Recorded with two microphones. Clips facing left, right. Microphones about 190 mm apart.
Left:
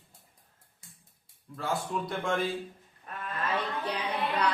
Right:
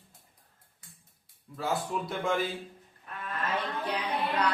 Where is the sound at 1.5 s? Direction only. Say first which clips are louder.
Right 1 dB; centre (ahead or behind).